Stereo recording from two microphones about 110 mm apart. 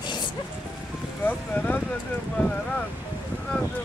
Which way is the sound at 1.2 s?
15° left (ahead or behind).